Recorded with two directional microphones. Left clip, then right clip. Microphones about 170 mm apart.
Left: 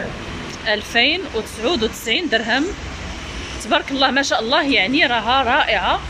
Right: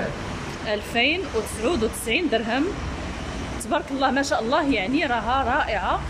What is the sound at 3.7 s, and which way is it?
Speech, 5° right (ahead or behind).